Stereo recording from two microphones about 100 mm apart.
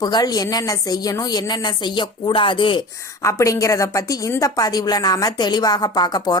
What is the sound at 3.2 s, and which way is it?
A woman's voice, 30° left (ahead or behind).